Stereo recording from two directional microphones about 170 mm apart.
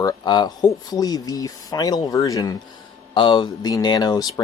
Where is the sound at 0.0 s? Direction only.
25° left (ahead or behind).